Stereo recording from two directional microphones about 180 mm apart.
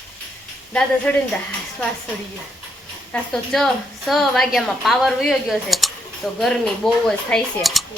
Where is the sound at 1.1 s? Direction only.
5° left (ahead or behind).